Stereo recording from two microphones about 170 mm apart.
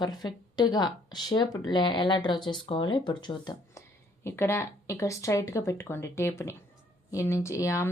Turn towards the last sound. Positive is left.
turn(degrees=15)  # may be behind; listen again after turning